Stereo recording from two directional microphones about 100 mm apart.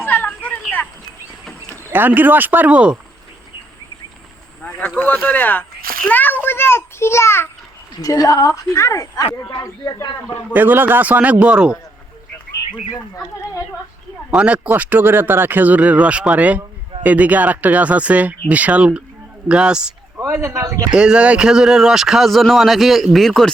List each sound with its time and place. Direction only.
0.0 s a sound: 20° left (ahead or behind)
1.9 s speech: 20° right (ahead or behind)
4.6 s boat: 20° left (ahead or behind)
4.9 s speech: 15° left (ahead or behind)
6.1 s a sound: 15° left (ahead or behind)
8.0 s a woman's voice: 35° left (ahead or behind)
10.5 s speech: 20° right (ahead or behind)
14.3 s speech: 10° right (ahead or behind)
20.1 s speech: 30° right (ahead or behind)
20.9 s speech: 10° right (ahead or behind)